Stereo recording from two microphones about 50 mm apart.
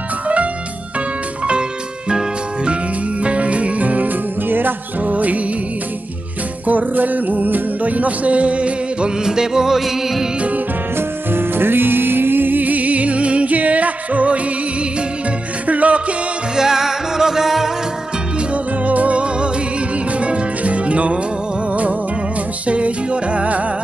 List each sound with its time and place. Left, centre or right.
2.0 s music: centre
6.7 s music: right
9.2 s music: centre
11.0 s music: right
15.6 s music: right
16.5 s music: centre
18.5 s music: right
22.7 s music: right